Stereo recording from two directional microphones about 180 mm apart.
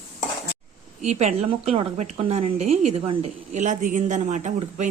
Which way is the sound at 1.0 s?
40° right (ahead or behind).